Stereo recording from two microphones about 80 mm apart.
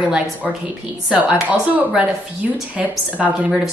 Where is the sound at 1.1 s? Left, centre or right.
Centre.